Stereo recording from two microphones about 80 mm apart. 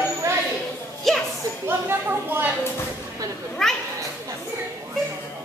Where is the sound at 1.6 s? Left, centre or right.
Right.